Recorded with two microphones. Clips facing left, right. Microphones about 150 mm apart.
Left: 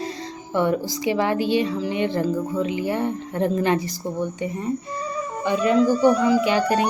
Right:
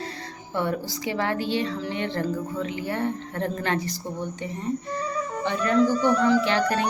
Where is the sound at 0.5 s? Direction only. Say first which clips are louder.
Left 6 dB; 15° left (ahead or behind).